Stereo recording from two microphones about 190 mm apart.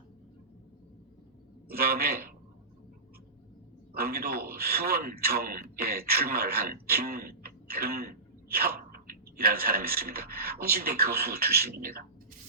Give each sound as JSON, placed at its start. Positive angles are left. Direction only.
{"t": 1.6, "sound": "a man's voice", "side_deg": -55}
{"t": 3.9, "sound": "a man's voice", "side_deg": -55}